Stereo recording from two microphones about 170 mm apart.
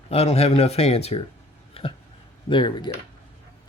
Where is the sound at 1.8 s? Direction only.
35° left (ahead or behind).